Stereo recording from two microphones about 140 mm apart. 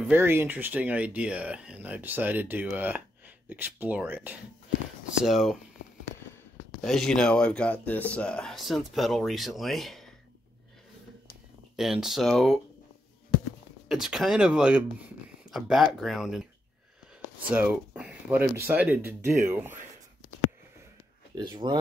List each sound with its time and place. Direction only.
0.0 s speech: 15° right (ahead or behind)
5.2 s speech: centre (ahead or behind)
6.8 s speech: 5° left (ahead or behind)
11.7 s speech: 5° right (ahead or behind)
13.8 s speech: 5° right (ahead or behind)
17.5 s speech: 10° right (ahead or behind)
21.4 s speech: 30° right (ahead or behind)